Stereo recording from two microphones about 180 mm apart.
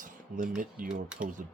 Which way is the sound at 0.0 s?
45° right (ahead or behind).